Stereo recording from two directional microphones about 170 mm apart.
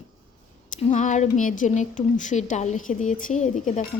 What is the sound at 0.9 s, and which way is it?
A woman's voice, 45° left (ahead or behind).